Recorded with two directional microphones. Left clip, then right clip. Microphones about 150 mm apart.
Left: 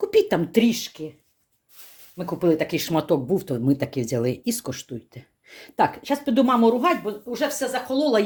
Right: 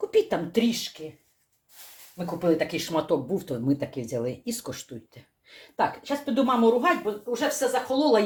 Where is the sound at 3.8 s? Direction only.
90° left.